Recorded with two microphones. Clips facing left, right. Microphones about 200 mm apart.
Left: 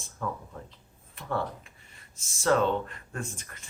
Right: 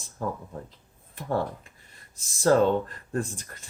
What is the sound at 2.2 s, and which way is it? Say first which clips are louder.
Speech: right 4 dB; 35° right (ahead or behind).